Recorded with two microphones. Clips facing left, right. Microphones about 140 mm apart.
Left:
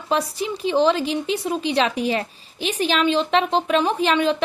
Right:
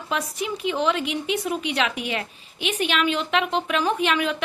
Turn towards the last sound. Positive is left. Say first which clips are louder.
# left 3 dB
turn(degrees=30)  # may be behind; listen again after turning